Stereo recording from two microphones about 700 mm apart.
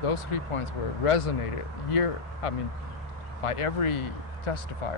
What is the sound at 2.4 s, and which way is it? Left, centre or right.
Speech, left.